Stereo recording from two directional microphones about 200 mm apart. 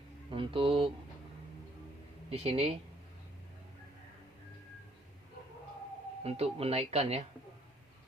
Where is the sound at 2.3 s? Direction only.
30° right (ahead or behind).